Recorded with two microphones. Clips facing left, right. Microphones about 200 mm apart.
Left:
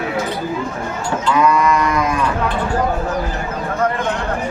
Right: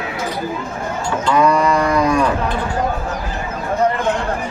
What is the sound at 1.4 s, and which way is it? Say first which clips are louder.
Livestock: even; 35° right (ahead or behind).